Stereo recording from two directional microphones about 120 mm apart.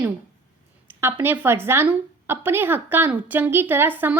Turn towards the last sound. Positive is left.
turn(degrees=-15)  # may be behind; listen again after turning